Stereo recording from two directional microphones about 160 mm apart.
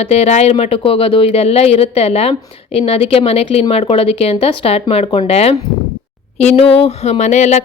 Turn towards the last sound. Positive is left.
turn(degrees=45)  # may be behind; listen again after turning